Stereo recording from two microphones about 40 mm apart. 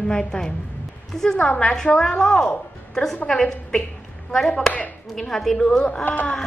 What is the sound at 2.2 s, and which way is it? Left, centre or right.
A woman's voice, centre.